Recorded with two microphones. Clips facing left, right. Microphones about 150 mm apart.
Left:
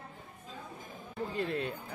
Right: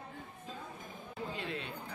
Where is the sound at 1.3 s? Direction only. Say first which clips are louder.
Left 10 dB; 45° left (ahead or behind).